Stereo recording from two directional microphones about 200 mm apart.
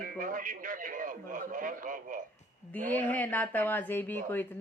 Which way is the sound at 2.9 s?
10° left (ahead or behind).